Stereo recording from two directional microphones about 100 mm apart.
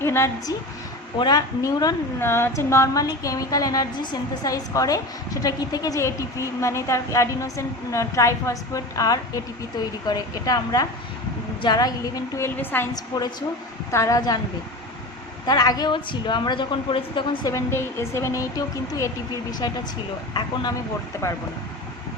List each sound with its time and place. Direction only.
0.0 s a woman's voice: 25° left (ahead or behind)
1.2 s speech: 45° left (ahead or behind)
2.1 s a woman's voice: 25° left (ahead or behind); by 12.2 s 40° left (ahead or behind)
12.5 s a woman's voice: 20° left (ahead or behind)
13.1 s a woman's voice: 45° left (ahead or behind)
13.9 s a woman's voice: 30° left (ahead or behind)
15.4 s a woman's voice: 40° left (ahead or behind)
17.4 s a woman's voice: 30° left (ahead or behind); by 20.7 s 45° left (ahead or behind)